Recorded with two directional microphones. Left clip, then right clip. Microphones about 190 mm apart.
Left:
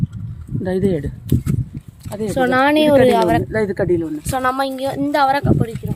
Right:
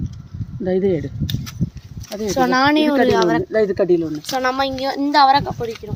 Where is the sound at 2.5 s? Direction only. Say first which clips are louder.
Left 4 dB; 15° left (ahead or behind).